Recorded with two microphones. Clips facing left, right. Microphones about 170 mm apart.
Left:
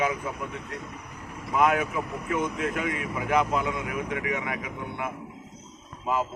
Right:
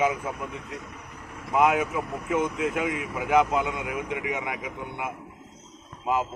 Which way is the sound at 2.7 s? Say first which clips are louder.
Right 1 dB; 15° right (ahead or behind).